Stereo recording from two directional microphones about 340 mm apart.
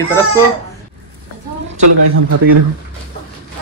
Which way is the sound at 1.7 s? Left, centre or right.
Right.